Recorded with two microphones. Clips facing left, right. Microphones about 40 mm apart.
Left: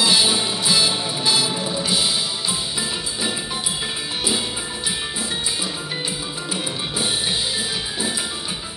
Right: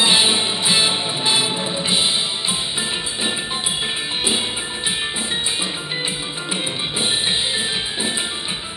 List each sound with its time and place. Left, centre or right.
0.0 s music: right